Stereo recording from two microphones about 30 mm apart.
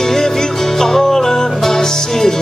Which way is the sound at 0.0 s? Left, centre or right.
Centre.